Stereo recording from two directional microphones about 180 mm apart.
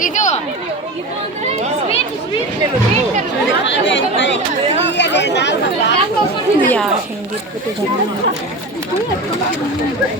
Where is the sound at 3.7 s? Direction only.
90° left.